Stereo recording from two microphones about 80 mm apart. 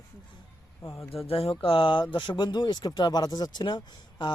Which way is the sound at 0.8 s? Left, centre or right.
Left.